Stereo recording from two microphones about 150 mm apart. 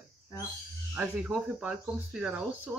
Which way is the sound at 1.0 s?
5° right (ahead or behind).